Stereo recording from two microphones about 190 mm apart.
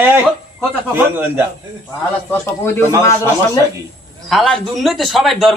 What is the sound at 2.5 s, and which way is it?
Speech, 10° left (ahead or behind).